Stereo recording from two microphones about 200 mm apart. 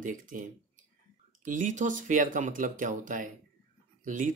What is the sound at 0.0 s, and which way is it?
Speech, 40° right (ahead or behind).